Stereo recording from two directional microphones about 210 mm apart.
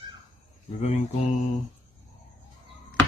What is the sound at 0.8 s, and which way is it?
Speech, 35° left (ahead or behind).